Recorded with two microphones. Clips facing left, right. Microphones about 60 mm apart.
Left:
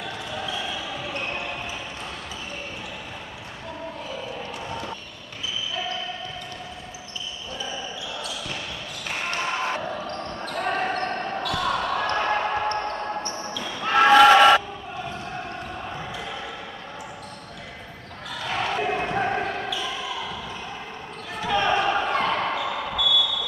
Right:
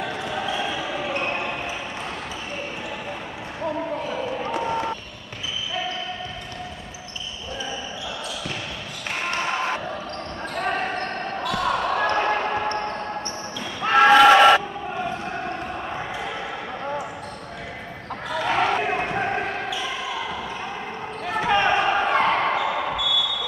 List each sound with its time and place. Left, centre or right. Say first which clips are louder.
0.0 s basketball bounce: right 5 dB; right
4.5 s basketball bounce: right 8 dB; right
9.1 s basketball bounce: right 2 dB; centre
11.4 s basketball bounce: right 3 dB; centre
14.1 s a sound: even; centre
15.9 s basketball bounce: right 4 dB; right
18.4 s basketball bounce: right 4 dB; right
21.3 s basketball bounce: right 3 dB; right
21.7 s basketball bounce: right 3 dB; right